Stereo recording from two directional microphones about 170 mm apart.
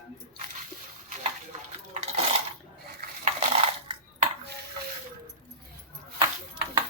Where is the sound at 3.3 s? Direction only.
40° right (ahead or behind).